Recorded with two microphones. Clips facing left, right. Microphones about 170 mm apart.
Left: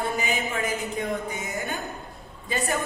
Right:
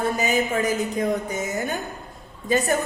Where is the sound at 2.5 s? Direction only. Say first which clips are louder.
Right 7 dB; 40° right (ahead or behind).